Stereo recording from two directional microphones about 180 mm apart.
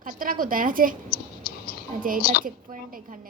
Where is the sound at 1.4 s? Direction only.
55° left (ahead or behind).